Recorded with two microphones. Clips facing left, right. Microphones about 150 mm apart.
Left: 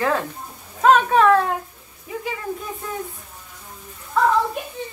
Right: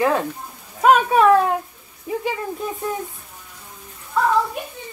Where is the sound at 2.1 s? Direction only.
30° right (ahead or behind).